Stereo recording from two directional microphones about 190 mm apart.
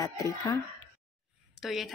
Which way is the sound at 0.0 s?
20° left (ahead or behind).